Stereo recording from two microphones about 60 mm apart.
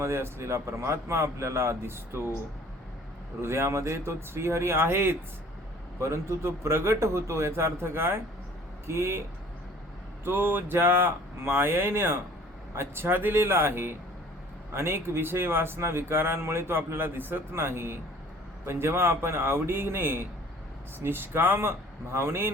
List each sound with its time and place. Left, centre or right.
0.0 s speech: right
3.4 s speech: right
6.0 s speech: right
10.2 s speech: right